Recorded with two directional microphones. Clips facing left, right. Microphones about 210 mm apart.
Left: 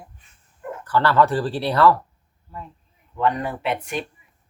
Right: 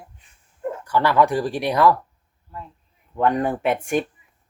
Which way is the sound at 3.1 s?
50° right (ahead or behind).